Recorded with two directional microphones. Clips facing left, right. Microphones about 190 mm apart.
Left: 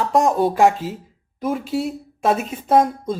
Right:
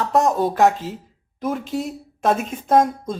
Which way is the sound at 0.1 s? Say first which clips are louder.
Left 1 dB; 15° left (ahead or behind).